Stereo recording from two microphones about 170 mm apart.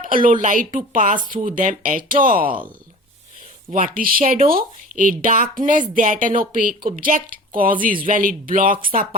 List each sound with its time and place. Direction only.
0.0 s speech: 55° right (ahead or behind)
3.7 s speech: 50° right (ahead or behind)